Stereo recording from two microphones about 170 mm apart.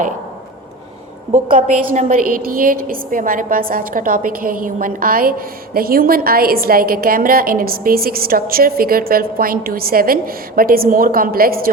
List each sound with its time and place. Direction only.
1.3 s a woman's voice: 45° right (ahead or behind)